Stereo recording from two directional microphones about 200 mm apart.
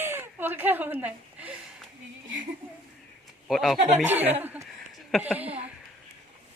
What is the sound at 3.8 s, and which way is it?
Speech, 35° right (ahead or behind).